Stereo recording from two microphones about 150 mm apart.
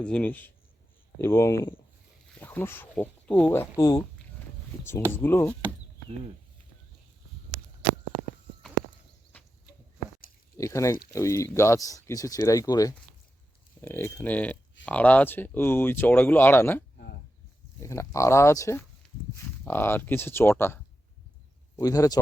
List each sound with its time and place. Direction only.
0.0 s speech: 10° left (ahead or behind)
10.6 s speech: 20° left (ahead or behind)